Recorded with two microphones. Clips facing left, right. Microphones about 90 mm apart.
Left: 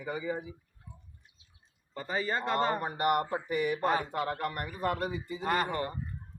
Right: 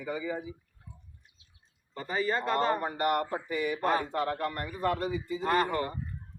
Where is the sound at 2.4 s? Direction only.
15° left (ahead or behind).